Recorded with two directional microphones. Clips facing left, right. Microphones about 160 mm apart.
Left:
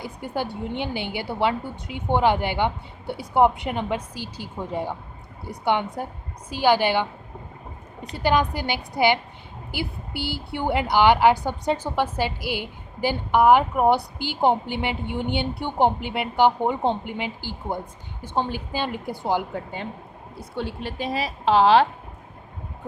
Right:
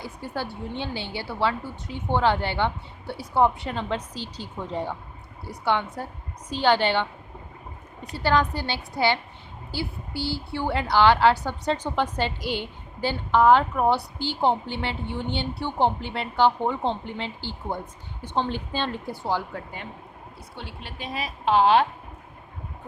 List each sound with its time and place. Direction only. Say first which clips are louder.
0.0 s a woman's voice: left 3 dB; 15° left (ahead or behind)
6.0 s a woman's voice: left 3 dB; 15° left (ahead or behind)
8.1 s a woman's voice: left 1 dB; 15° left (ahead or behind)
20.6 s a woman's voice: left 9 dB; 45° left (ahead or behind)